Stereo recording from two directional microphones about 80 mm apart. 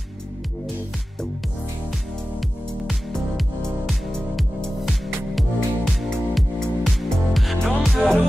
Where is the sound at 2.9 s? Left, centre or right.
Centre.